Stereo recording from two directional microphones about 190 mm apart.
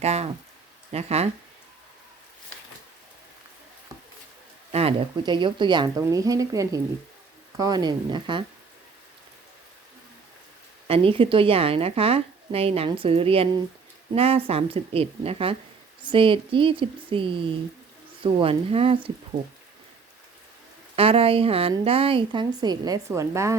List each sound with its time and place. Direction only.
0.0 s a woman's voice: 35° right (ahead or behind)
4.7 s speech: 30° right (ahead or behind)
10.8 s a woman's voice: 30° right (ahead or behind)
20.9 s speech: 30° right (ahead or behind)